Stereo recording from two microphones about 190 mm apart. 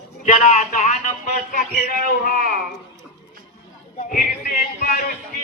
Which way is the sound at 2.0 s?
50° left (ahead or behind).